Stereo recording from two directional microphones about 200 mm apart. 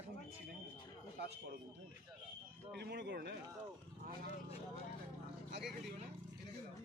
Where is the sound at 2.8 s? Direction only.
55° right (ahead or behind).